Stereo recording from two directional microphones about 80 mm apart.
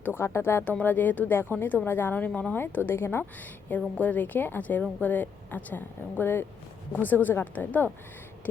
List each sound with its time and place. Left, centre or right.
0.0 s speech: left